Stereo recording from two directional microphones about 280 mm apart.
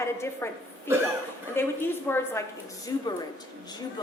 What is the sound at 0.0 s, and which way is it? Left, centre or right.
Speech, centre.